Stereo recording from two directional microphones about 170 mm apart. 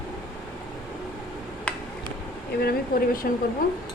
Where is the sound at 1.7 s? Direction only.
5° left (ahead or behind).